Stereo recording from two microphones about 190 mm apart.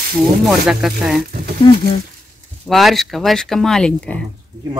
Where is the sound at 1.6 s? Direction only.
25° left (ahead or behind).